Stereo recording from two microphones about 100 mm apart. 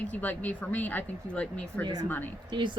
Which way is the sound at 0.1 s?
15° left (ahead or behind).